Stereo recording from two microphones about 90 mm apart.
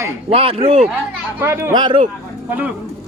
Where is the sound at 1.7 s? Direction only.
60° right (ahead or behind).